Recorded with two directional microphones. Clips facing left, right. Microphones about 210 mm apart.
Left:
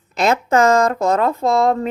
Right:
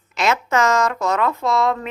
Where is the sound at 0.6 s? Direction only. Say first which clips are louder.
Left 5 dB; 55° left (ahead or behind).